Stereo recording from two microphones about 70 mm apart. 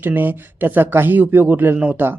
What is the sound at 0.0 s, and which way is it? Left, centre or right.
Speech, right.